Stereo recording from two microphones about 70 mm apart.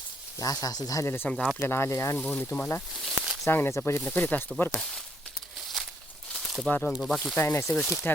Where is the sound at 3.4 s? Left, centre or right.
Left.